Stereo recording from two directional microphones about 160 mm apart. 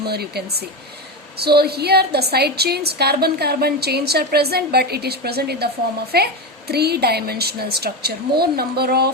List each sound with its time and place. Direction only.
0.0 s a woman's voice: 85° right
6.7 s a woman's voice: 90° right